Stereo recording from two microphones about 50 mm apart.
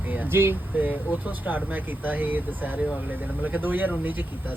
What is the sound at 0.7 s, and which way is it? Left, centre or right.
Speech, right.